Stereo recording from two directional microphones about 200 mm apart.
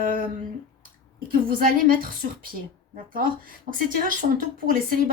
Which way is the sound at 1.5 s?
45° right (ahead or behind).